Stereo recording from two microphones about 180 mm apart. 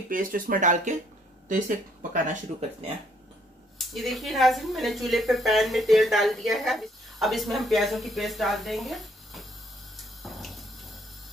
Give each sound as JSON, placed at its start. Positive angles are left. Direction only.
{"t": 0.1, "sound": "speech", "side_deg": -50}
{"t": 3.8, "sound": "a woman's voice", "side_deg": 0}
{"t": 9.9, "sound": "a sound", "side_deg": 0}